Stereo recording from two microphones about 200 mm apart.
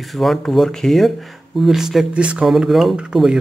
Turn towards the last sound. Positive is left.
turn(degrees=-5)  # may be behind; listen again after turning